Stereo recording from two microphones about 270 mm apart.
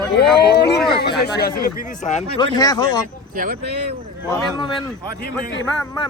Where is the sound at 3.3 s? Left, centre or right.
Right.